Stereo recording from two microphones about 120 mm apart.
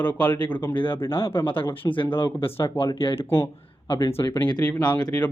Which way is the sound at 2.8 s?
50° left (ahead or behind).